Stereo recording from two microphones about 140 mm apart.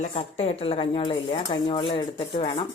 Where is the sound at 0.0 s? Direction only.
55° left (ahead or behind).